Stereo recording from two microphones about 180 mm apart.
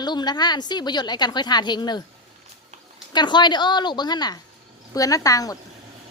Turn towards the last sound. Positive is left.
turn(degrees=20)  # may be behind; listen again after turning